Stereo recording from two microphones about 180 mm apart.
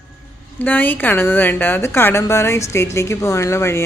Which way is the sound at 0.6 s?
10° left (ahead or behind).